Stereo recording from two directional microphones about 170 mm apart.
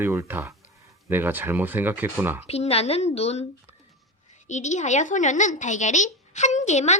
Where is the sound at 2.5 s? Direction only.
35° left (ahead or behind).